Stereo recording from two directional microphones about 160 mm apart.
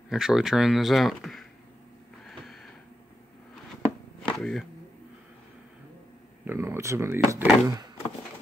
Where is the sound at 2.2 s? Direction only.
Centre (ahead or behind).